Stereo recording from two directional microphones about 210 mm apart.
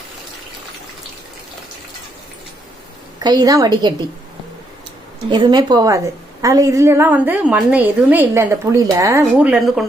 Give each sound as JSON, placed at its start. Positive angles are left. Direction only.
{"t": 3.2, "sound": "a woman's voice", "side_deg": -20}
{"t": 5.3, "sound": "a woman's voice", "side_deg": -20}
{"t": 9.2, "sound": "speech", "side_deg": -5}